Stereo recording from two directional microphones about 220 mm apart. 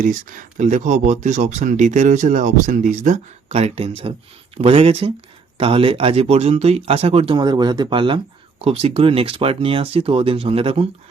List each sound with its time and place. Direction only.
0.0 s speech: 40° right (ahead or behind)